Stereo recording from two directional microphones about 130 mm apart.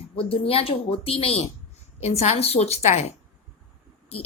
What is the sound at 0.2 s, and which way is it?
A woman's voice, 45° left (ahead or behind).